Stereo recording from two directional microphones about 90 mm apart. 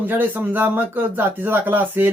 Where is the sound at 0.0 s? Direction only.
20° right (ahead or behind).